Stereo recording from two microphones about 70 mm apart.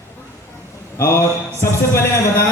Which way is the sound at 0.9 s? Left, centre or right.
Left.